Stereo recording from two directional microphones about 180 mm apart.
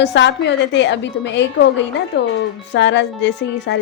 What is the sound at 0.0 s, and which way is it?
Speech, 80° left.